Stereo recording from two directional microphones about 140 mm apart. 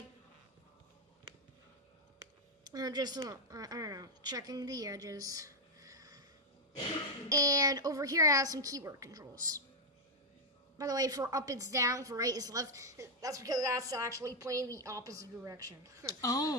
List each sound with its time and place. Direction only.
2.6 s speech: 30° right (ahead or behind)
7.3 s a woman's voice: 25° right (ahead or behind)
10.8 s a woman's voice: 25° right (ahead or behind)
16.2 s speech: 25° left (ahead or behind)